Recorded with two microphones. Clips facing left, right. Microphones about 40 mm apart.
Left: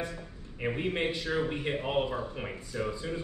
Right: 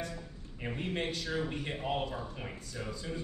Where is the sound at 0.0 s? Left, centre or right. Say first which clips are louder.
Left 3 dB; left.